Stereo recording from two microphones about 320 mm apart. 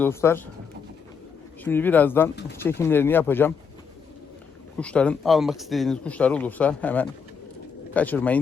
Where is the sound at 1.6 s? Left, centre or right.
Centre.